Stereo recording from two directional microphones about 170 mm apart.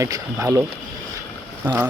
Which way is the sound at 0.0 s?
20° right (ahead or behind).